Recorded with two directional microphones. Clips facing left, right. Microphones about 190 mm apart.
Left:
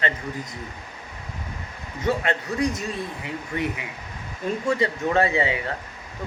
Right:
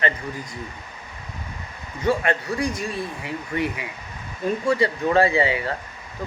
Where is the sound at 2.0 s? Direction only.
20° left (ahead or behind).